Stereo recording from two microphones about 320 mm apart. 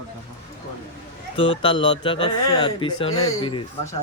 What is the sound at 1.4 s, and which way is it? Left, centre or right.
A man's voice, centre.